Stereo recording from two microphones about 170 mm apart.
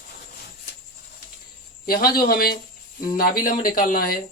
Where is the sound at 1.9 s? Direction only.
60° left (ahead or behind).